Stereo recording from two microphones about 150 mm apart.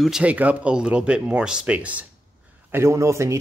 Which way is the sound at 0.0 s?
5° right (ahead or behind).